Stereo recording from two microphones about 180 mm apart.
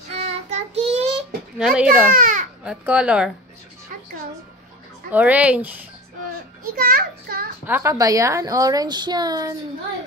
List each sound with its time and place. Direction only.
0.1 s child singing: 35° right (ahead or behind)
1.6 s speech: 5° right (ahead or behind)
2.0 s speech: 45° right (ahead or behind)
2.6 s speech: 5° right (ahead or behind)
5.1 s speech: 10° right (ahead or behind)
6.7 s a child's voice: 55° right (ahead or behind)
7.6 s a woman's voice: 15° right (ahead or behind)